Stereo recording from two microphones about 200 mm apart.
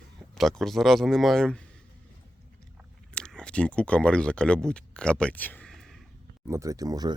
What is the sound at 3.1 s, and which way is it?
Speech, 5° left (ahead or behind).